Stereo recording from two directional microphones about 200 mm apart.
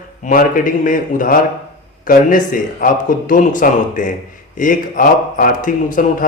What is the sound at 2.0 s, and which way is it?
Mantra, 40° left (ahead or behind).